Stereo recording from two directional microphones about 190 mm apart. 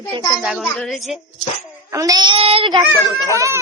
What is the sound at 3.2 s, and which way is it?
Child singing, 15° right (ahead or behind).